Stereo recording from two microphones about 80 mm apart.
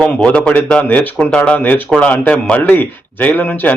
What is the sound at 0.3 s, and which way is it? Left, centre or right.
A man's voice, centre.